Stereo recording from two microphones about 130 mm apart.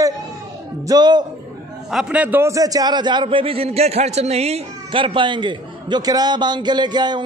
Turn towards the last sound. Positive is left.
turn(degrees=-35)  # may be behind; listen again after turning